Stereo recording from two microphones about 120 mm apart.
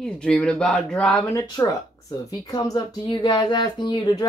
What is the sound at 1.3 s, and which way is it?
Speech, 30° left (ahead or behind).